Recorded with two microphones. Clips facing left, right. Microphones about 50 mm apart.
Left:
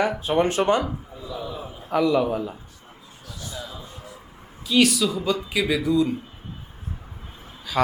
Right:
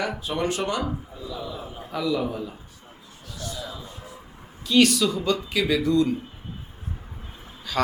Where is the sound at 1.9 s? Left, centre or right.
Left.